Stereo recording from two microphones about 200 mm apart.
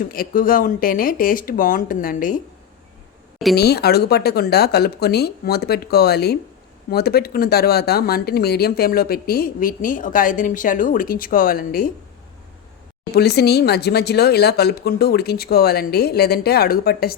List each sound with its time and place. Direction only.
0.0 s speech: 45° left (ahead or behind)
3.5 s speech: 55° left (ahead or behind)
13.1 s speech: 55° left (ahead or behind)